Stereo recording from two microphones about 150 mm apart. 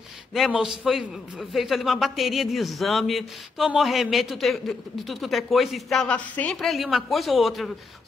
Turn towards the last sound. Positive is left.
turn(degrees=0)  # may be behind; listen again after turning